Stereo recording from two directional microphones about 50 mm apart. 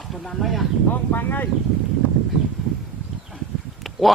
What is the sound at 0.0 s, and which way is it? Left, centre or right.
Speech, centre.